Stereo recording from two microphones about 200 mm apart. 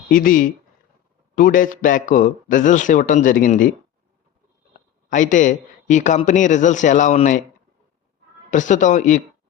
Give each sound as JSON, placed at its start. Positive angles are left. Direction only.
{"t": 0.1, "sound": "a man's voice", "side_deg": 45}
{"t": 5.0, "sound": "a man's voice", "side_deg": 40}
{"t": 8.4, "sound": "a man's voice", "side_deg": 40}